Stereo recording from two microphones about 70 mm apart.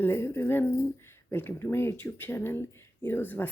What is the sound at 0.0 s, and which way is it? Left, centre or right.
Speech, left.